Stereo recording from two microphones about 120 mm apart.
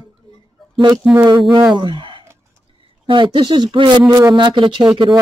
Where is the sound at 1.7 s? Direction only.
40° right (ahead or behind).